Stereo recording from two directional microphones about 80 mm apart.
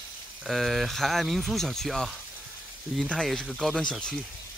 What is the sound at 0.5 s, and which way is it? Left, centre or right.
Speech, centre.